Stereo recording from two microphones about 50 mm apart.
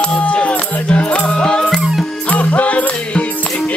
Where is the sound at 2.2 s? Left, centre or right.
Left.